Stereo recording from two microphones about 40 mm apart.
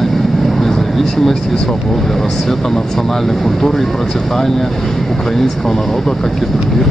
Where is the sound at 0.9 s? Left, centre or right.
Centre.